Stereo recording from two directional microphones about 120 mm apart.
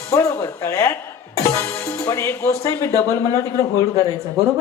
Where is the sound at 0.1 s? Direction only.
25° left (ahead or behind).